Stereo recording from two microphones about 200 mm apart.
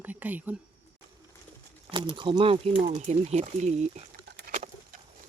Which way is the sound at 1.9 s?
25° right (ahead or behind).